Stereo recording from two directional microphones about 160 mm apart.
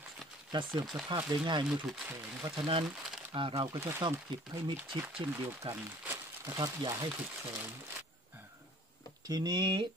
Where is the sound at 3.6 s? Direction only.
20° right (ahead or behind).